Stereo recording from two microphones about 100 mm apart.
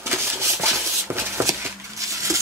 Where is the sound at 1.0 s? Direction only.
25° right (ahead or behind).